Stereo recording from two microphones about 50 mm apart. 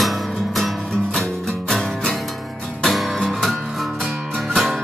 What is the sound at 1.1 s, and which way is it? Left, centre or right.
Music, centre.